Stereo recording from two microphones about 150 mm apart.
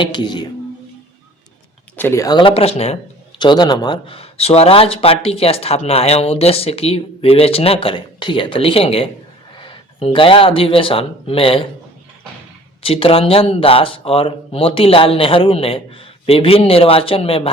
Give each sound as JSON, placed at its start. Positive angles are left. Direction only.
{"t": 0.0, "sound": "speech", "side_deg": 30}
{"t": 2.0, "sound": "speech", "side_deg": 15}
{"t": 3.3, "sound": "speech", "side_deg": 30}
{"t": 12.8, "sound": "speech", "side_deg": 40}